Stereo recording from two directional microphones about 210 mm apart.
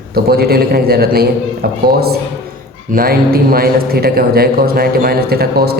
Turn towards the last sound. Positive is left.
turn(degrees=-50)  # may be behind; listen again after turning